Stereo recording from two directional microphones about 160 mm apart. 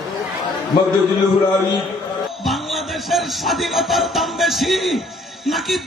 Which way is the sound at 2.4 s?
Centre (ahead or behind).